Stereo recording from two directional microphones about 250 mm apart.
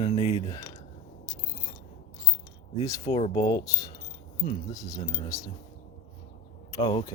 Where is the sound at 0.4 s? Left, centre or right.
Centre.